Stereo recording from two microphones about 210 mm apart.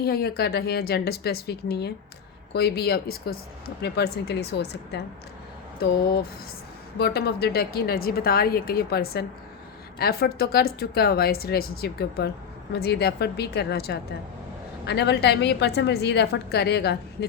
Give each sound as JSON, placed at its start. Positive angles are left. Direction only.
{"t": 0.0, "sound": "a woman's voice", "side_deg": 50}